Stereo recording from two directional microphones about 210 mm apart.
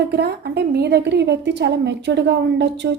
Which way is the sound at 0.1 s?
50° right (ahead or behind).